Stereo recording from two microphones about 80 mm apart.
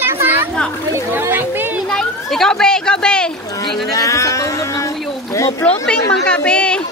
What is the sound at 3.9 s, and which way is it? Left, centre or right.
Speech, left.